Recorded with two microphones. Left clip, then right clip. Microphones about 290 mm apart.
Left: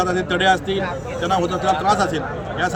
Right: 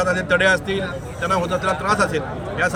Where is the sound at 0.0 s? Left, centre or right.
Centre.